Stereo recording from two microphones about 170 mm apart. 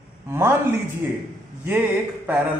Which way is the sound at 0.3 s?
15° right (ahead or behind).